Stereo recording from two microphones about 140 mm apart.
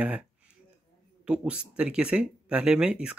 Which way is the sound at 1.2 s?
10° right (ahead or behind).